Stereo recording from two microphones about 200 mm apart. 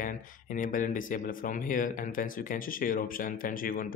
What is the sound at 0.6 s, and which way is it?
Speech, 40° left (ahead or behind).